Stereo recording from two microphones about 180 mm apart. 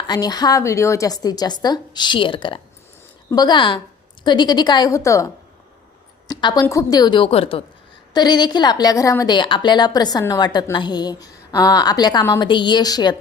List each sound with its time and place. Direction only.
0.1 s a woman's voice: 20° left (ahead or behind)